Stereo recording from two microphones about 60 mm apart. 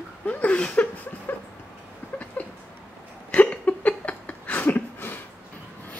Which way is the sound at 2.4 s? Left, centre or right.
Left.